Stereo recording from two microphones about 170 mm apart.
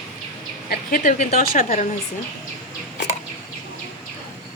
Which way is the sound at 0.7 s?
60° left (ahead or behind).